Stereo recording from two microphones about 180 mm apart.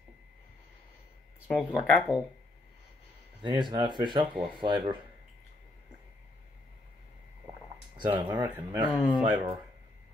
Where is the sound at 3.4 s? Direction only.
25° right (ahead or behind).